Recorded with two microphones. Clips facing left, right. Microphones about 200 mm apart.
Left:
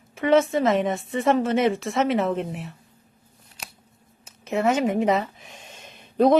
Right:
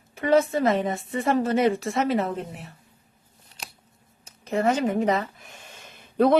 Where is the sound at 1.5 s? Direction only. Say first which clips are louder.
Left 1 dB; centre (ahead or behind).